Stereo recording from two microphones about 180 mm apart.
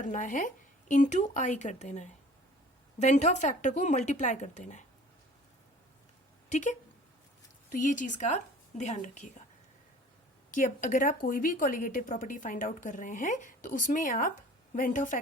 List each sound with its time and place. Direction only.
0.0 s a woman's voice: 45° left (ahead or behind)
6.5 s a woman's voice: 40° left (ahead or behind)
10.5 s a woman's voice: 45° left (ahead or behind)